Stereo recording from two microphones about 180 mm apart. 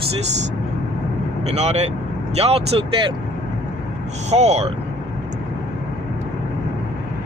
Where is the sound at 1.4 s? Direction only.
35° right (ahead or behind).